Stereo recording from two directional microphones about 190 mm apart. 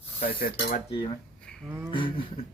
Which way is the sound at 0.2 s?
50° left (ahead or behind).